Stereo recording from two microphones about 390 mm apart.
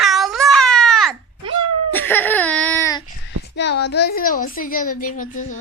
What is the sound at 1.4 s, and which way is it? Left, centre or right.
Cat, right.